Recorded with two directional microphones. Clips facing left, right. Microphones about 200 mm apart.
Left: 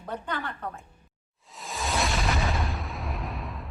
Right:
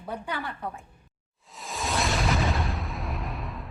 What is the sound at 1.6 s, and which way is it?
Music, centre (ahead or behind).